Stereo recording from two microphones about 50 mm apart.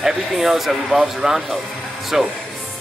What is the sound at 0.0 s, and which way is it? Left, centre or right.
Speech, centre.